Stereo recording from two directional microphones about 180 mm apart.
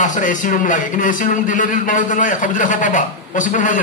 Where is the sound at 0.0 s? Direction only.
45° left (ahead or behind).